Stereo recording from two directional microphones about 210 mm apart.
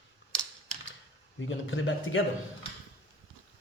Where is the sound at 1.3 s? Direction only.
65° left (ahead or behind).